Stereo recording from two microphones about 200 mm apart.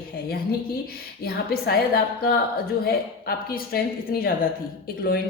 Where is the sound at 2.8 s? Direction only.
50° left (ahead or behind).